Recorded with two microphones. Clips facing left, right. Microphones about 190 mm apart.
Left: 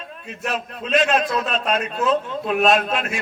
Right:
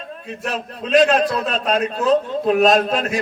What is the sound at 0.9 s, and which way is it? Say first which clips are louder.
A man's voice: right 4 dB; 35° right (ahead or behind).